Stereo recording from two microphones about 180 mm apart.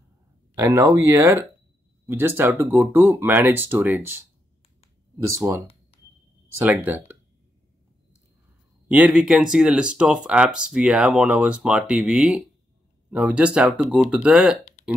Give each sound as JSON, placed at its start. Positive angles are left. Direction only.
{"t": 0.6, "sound": "speech", "side_deg": -15}
{"t": 5.4, "sound": "speech", "side_deg": -15}
{"t": 6.6, "sound": "speech", "side_deg": -10}
{"t": 8.8, "sound": "speech", "side_deg": -5}